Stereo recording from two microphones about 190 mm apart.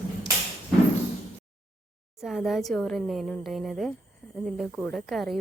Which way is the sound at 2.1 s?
Centre (ahead or behind).